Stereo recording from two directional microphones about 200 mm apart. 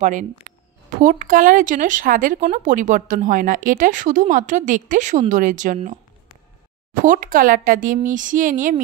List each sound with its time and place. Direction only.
0.0 s speech: 40° right (ahead or behind)
7.0 s speech: 40° right (ahead or behind)